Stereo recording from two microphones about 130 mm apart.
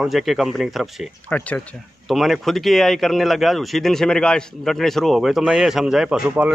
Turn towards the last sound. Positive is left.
turn(degrees=-5)  # may be behind; listen again after turning